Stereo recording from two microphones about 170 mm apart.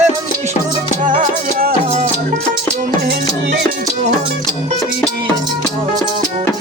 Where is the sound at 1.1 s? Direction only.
55° right (ahead or behind).